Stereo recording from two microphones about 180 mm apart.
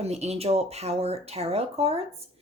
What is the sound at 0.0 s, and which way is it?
Speech, 35° right (ahead or behind).